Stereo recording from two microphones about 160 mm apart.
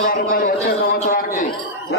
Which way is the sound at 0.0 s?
60° left (ahead or behind).